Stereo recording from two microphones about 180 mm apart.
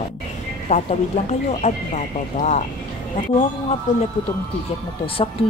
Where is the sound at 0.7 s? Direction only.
40° left (ahead or behind).